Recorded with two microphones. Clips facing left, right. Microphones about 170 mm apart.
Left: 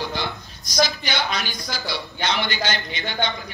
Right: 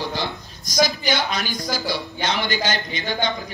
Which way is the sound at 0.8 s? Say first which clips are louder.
Right 3 dB; 45° right (ahead or behind).